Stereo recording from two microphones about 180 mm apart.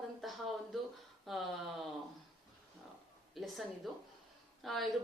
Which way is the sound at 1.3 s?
Centre (ahead or behind).